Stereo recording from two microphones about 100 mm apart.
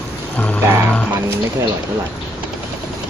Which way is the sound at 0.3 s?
15° left (ahead or behind).